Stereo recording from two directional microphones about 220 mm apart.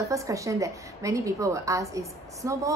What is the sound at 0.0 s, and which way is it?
A woman's voice, 15° right (ahead or behind).